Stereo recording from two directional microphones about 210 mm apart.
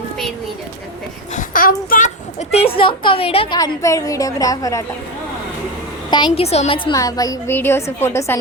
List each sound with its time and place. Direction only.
1.4 s a child's voice: 40° left (ahead or behind); by 4.8 s 15° left (ahead or behind)
6.1 s a woman's voice: 20° left (ahead or behind)